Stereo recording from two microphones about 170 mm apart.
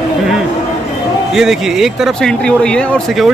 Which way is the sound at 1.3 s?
Centre (ahead or behind).